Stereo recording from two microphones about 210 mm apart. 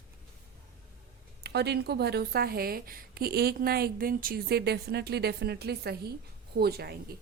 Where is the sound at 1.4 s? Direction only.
50° right (ahead or behind).